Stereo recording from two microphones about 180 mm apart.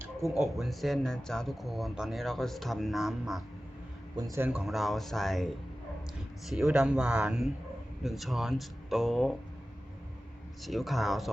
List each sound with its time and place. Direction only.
0.3 s speech: centre (ahead or behind)
4.2 s speech: 15° right (ahead or behind); by 9.3 s centre (ahead or behind)
10.6 s speech: centre (ahead or behind)